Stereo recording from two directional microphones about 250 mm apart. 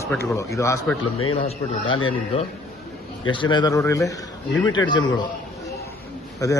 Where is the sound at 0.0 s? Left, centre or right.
Centre.